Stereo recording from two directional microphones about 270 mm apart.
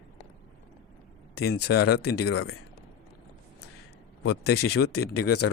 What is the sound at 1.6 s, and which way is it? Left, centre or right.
Speech, left.